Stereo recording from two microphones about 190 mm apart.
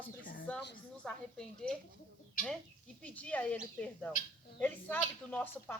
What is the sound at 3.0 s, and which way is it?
Speech, 5° left (ahead or behind).